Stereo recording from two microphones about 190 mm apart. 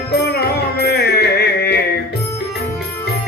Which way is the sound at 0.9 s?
60° left (ahead or behind).